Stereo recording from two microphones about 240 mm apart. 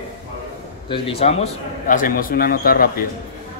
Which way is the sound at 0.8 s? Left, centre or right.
Left.